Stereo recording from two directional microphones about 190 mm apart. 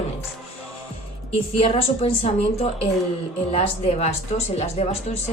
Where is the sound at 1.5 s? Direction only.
30° left (ahead or behind).